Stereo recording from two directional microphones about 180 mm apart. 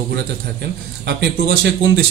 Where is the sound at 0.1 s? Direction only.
65° right (ahead or behind).